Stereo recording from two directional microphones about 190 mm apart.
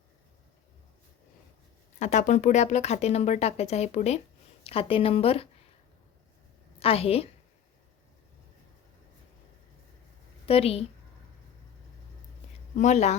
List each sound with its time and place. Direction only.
2.0 s speech: 40° left (ahead or behind)
6.7 s a woman's voice: 30° left (ahead or behind)
10.4 s a woman's voice: 30° left (ahead or behind)
12.7 s speech: 40° left (ahead or behind)